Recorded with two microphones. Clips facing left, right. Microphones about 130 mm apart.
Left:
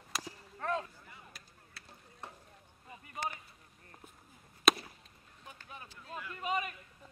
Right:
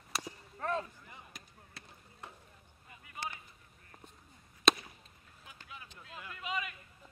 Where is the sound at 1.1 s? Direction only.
20° right (ahead or behind).